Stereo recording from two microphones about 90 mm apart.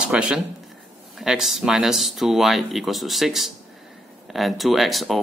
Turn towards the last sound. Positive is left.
turn(degrees=0)  # may be behind; listen again after turning